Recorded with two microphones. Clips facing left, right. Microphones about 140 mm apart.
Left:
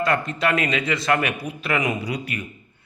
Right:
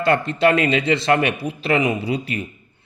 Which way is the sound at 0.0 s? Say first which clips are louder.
Right 5 dB; 30° right (ahead or behind).